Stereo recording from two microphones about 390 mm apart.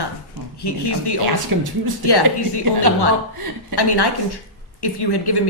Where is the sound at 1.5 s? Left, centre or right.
Right.